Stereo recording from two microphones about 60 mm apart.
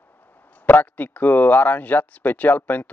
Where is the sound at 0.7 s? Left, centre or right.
Left.